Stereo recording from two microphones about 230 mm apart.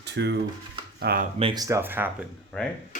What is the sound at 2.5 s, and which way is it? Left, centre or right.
Speech, centre.